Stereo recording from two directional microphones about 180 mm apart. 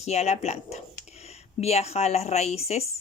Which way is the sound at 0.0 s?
35° left (ahead or behind).